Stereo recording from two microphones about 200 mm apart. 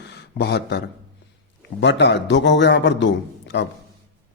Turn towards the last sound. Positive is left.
turn(degrees=60)  # may be behind; listen again after turning